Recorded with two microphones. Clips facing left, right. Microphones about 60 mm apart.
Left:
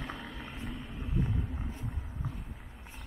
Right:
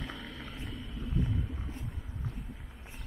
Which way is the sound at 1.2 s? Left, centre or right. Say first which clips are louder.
Even; left.